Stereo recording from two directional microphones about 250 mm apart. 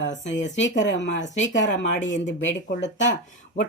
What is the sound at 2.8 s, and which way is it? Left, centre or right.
Speech, left.